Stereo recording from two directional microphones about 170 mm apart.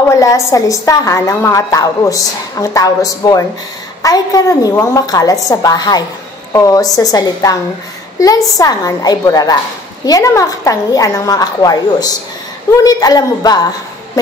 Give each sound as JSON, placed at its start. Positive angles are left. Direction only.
{"t": 0.2, "sound": "a woman's voice", "side_deg": 20}